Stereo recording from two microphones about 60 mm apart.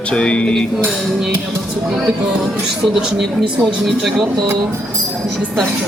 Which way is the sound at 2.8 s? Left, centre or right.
Centre.